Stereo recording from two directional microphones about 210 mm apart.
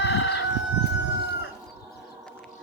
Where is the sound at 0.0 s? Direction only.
60° left (ahead or behind).